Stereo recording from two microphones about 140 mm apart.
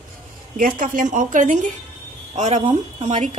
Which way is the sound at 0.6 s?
75° right (ahead or behind).